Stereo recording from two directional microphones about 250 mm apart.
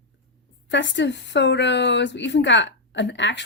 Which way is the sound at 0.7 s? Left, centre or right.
Left.